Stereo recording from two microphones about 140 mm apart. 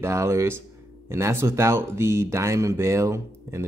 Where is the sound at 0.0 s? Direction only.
20° right (ahead or behind).